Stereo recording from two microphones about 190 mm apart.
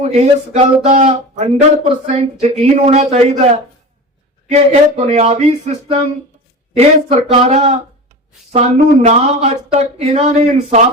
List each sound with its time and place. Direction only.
0.0 s speech: 35° right (ahead or behind)